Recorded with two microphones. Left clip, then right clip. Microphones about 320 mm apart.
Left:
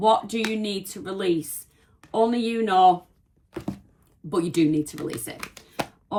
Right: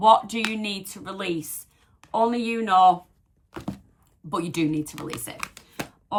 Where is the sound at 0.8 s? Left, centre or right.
Right.